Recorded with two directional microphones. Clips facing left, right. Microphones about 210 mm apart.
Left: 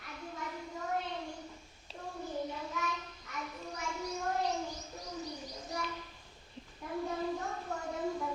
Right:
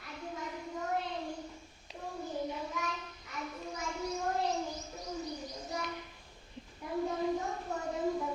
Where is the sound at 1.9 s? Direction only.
15° right (ahead or behind).